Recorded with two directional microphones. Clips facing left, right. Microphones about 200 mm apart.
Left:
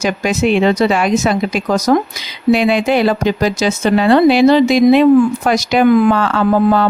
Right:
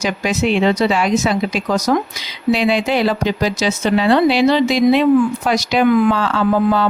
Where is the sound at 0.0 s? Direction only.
50° left (ahead or behind).